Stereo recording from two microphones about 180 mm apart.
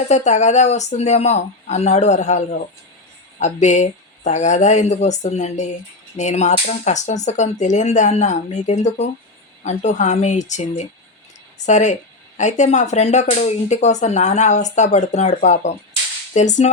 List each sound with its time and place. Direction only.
0.1 s speech: 40° left (ahead or behind)